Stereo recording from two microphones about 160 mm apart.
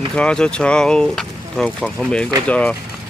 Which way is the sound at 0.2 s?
5° left (ahead or behind).